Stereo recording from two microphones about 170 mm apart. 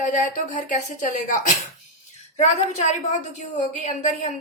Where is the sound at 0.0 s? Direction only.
45° left (ahead or behind).